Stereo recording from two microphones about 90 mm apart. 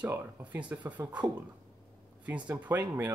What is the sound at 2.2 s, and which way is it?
Speech, 15° right (ahead or behind).